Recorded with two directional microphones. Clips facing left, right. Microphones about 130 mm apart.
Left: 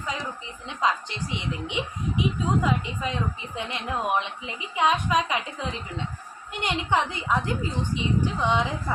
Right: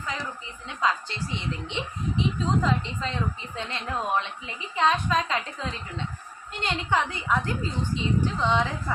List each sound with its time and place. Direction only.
0.7 s a woman's voice: 20° left (ahead or behind)